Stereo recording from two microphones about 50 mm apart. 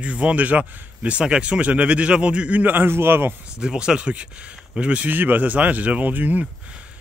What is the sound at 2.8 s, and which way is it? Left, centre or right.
Speech, right.